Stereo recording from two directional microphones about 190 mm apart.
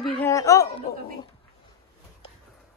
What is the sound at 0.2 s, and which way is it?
Speech, 15° left (ahead or behind).